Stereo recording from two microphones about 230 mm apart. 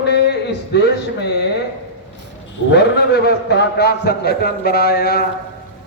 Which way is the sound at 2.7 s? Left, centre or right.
Left.